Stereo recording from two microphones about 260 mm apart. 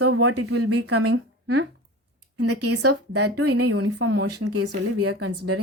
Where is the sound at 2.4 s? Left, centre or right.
Right.